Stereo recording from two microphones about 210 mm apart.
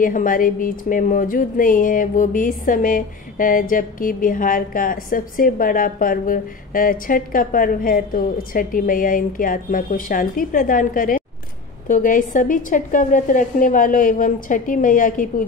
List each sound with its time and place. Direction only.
0.0 s speech: 40° left (ahead or behind)